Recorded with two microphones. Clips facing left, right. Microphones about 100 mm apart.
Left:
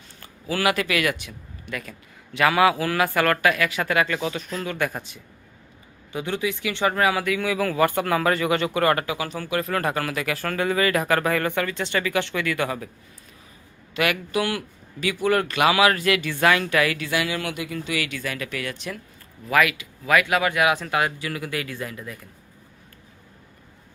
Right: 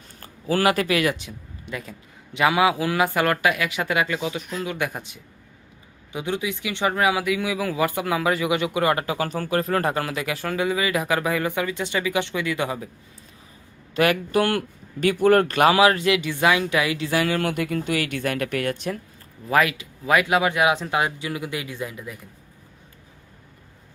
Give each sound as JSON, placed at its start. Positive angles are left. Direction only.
{"t": 0.2, "sound": "a man's voice", "side_deg": -40}
{"t": 9.0, "sound": "a man's voice", "side_deg": -45}
{"t": 13.9, "sound": "speech", "side_deg": -35}
{"t": 15.0, "sound": "speech", "side_deg": -45}
{"t": 15.8, "sound": "speech", "side_deg": -25}
{"t": 17.1, "sound": "speech", "side_deg": -40}
{"t": 19.5, "sound": "speech", "side_deg": -30}